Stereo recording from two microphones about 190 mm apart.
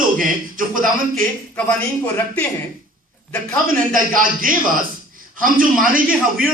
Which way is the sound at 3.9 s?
45° right (ahead or behind).